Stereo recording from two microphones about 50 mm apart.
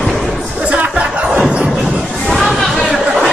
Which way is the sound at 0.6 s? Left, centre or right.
Right.